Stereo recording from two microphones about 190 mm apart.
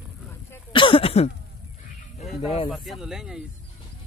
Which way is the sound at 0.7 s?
25° left (ahead or behind).